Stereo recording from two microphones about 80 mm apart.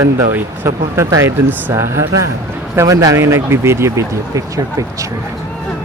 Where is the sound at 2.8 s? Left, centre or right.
Right.